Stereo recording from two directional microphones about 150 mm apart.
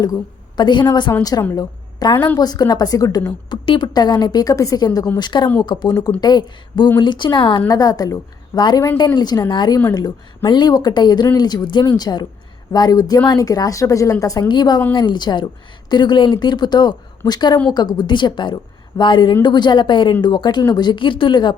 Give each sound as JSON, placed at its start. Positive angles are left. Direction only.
{"t": 0.0, "sound": "a woman's voice", "side_deg": 25}
{"t": 2.1, "sound": "a woman's voice", "side_deg": 10}
{"t": 2.4, "sound": "a woman's voice", "side_deg": 25}